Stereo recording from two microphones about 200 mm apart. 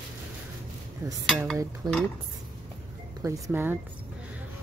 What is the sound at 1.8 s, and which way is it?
Speech, 20° right (ahead or behind).